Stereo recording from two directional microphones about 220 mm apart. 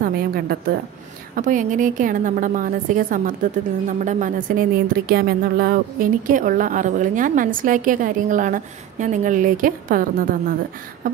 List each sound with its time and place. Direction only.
0.0 s a woman's voice: 45° right (ahead or behind)